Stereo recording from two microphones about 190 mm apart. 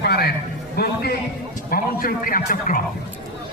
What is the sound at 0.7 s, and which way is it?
A man's voice, 55° left (ahead or behind).